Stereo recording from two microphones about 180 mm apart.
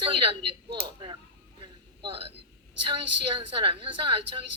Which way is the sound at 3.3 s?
30° right (ahead or behind).